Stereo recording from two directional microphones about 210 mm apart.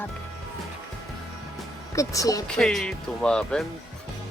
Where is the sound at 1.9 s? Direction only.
15° left (ahead or behind).